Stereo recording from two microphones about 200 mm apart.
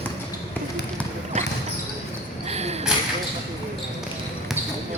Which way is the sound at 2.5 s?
30° right (ahead or behind).